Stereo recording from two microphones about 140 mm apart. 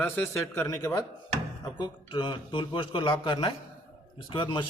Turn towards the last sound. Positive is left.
turn(degrees=35)  # may be behind; listen again after turning